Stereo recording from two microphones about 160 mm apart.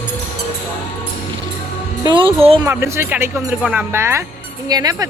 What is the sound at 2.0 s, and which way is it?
Speech, 30° right (ahead or behind).